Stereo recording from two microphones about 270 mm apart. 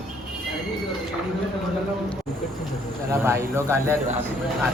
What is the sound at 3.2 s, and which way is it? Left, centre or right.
Speech, centre.